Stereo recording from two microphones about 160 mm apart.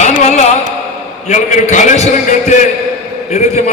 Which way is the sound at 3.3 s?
45° left (ahead or behind).